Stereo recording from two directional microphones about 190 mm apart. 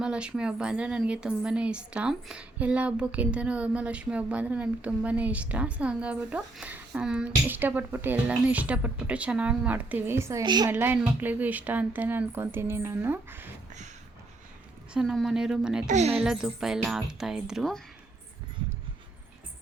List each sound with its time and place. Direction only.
0.0 s a woman's voice: 5° right (ahead or behind); by 10.7 s 20° right (ahead or behind)
10.7 s a woman's voice: 10° right (ahead or behind)
14.9 s speech: centre (ahead or behind)
15.9 s a woman's voice: 35° right (ahead or behind)
16.2 s speech: centre (ahead or behind)